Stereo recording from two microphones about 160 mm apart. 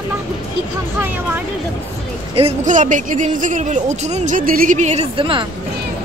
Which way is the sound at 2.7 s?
50° right (ahead or behind).